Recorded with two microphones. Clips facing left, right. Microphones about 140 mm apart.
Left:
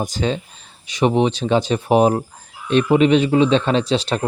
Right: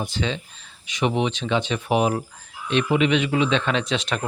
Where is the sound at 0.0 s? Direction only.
40° left (ahead or behind).